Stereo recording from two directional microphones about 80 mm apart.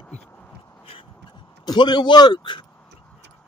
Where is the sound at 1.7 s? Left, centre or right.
Left.